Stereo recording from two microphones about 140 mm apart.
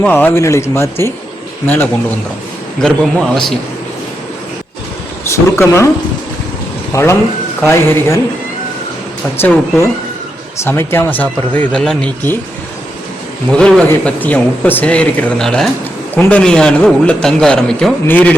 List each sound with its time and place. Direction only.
0.0 s speech: 10° left (ahead or behind)
2.8 s a man's voice: 5° left (ahead or behind)
5.2 s speech: 20° left (ahead or behind)
6.9 s speech: 20° left (ahead or behind)
9.4 s speech: 20° left (ahead or behind)
13.5 s speech: 5° left (ahead or behind)